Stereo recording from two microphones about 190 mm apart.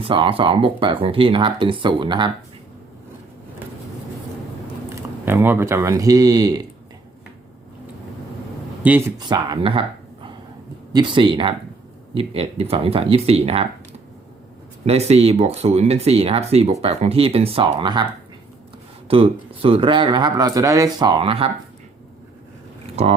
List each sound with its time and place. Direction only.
0.0 s speech: 30° right (ahead or behind)
5.2 s speech: 10° right (ahead or behind)
8.8 s speech: 10° right (ahead or behind); by 9.8 s 25° right (ahead or behind)
10.9 s speech: 25° right (ahead or behind)
14.8 s speech: 35° right (ahead or behind)
19.0 s speech: 30° right (ahead or behind)
22.9 s a sound: 35° right (ahead or behind)